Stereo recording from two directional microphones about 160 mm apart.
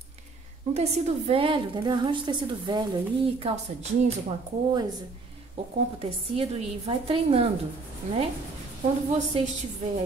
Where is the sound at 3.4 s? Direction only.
40° right (ahead or behind).